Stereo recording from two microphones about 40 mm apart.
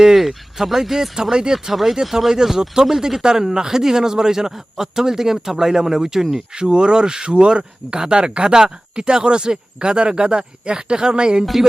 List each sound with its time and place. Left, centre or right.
0.0 s speech: centre